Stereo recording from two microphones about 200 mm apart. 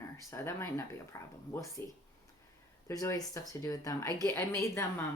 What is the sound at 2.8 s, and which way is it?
Speech, 15° left (ahead or behind).